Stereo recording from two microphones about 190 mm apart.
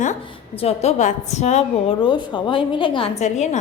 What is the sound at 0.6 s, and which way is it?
A woman's voice, 35° left (ahead or behind).